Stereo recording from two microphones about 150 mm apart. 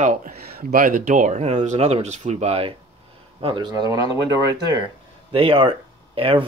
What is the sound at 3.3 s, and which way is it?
Speech, 30° right (ahead or behind).